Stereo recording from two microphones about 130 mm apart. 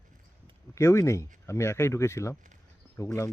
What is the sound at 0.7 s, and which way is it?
Speech, 20° left (ahead or behind).